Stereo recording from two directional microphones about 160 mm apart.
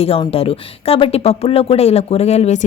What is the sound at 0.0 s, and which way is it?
Speech, 35° left (ahead or behind).